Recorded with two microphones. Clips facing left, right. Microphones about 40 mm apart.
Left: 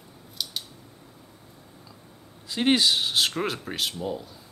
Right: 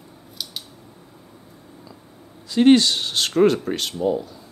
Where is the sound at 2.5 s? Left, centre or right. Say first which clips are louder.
Right 7 dB; centre.